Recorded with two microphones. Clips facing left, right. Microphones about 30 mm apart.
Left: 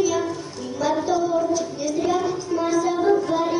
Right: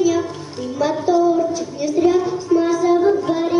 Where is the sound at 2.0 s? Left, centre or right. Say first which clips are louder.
Right 7 dB; centre.